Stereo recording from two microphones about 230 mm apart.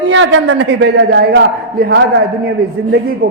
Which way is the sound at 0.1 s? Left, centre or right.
Right.